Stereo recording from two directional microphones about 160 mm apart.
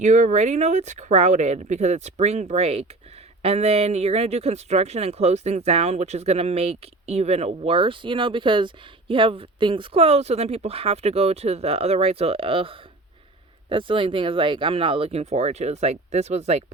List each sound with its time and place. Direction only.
0.0 s speech: 50° right (ahead or behind)